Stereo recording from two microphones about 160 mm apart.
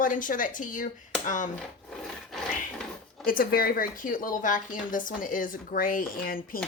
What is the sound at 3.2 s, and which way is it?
A woman's voice, 60° left (ahead or behind).